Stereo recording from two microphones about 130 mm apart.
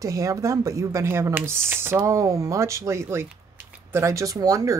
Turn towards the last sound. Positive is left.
turn(degrees=-30)  # may be behind; listen again after turning